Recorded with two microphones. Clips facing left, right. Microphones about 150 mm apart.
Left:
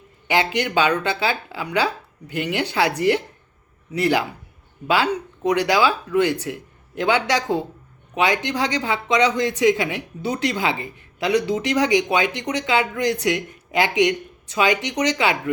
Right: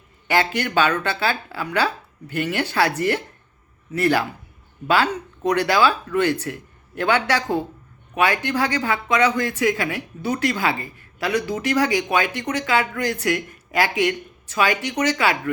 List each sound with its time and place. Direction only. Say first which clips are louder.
0.3 s speech: even; 15° left (ahead or behind)